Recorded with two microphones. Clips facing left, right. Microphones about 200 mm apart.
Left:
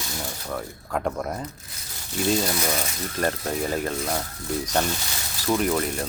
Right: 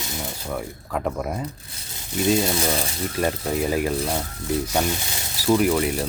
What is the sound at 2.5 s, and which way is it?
Speech, 25° right (ahead or behind).